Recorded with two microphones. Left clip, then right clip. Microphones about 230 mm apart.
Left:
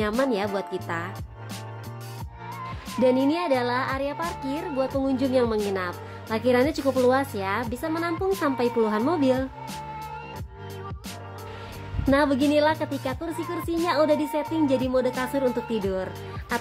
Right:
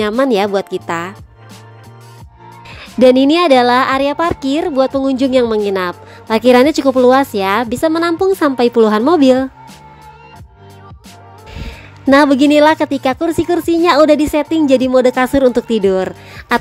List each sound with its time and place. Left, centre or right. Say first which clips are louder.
0.3 s speech: right 12 dB; right
3.0 s speech: right 13 dB; right
12.1 s speech: right 12 dB; right